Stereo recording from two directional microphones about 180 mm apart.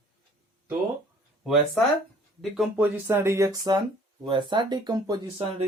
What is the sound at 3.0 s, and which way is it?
Speech, 15° right (ahead or behind).